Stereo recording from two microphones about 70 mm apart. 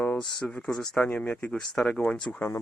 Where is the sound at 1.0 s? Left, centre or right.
Left.